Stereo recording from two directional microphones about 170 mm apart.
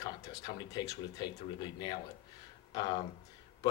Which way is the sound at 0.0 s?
20° left (ahead or behind).